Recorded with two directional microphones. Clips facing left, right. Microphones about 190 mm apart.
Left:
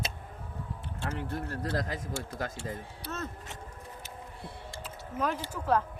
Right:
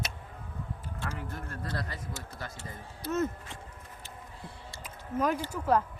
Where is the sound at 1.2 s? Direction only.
35° left (ahead or behind).